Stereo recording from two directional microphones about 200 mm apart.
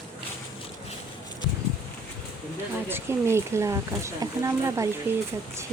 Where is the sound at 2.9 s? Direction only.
15° right (ahead or behind).